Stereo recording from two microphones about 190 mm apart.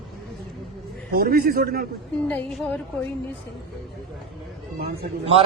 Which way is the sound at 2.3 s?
5° left (ahead or behind).